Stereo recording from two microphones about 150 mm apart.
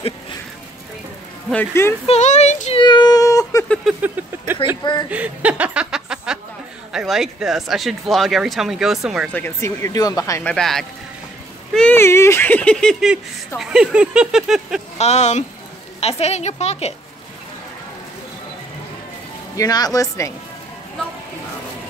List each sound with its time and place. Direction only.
1.5 s speech: 15° left (ahead or behind)
2.0 s a woman's voice: 50° left (ahead or behind)
2.8 s a sound: 30° left (ahead or behind)
3.6 s speech: 5° left (ahead or behind)
5.1 s chuckle: 10° right (ahead or behind)
6.9 s speech: 5° right (ahead or behind)
9.3 s speech: 15° left (ahead or behind)
10.4 s speech: 5° left (ahead or behind)
12.0 s speech: 20° left (ahead or behind)
13.6 s speech: 5° right (ahead or behind)
15.0 s a woman's voice: 50° left (ahead or behind)
19.5 s speech: 25° left (ahead or behind)